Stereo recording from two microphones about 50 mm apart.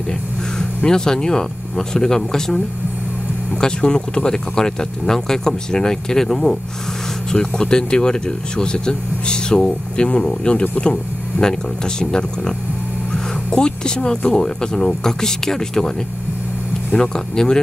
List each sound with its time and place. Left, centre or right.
0.6 s speech: centre
3.6 s speech: centre
16.9 s speech: centre